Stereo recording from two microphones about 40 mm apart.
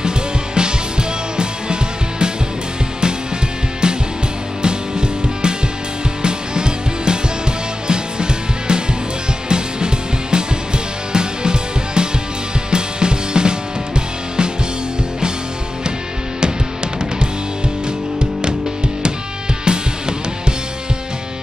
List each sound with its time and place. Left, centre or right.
0.6 s music: right
3.8 s music: right
19.6 s music: right